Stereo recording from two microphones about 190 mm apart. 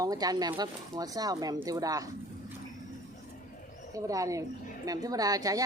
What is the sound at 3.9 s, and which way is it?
Speech, 15° right (ahead or behind).